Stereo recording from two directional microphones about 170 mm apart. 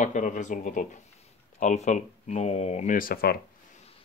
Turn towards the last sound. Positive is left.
turn(degrees=65)  # may be behind; listen again after turning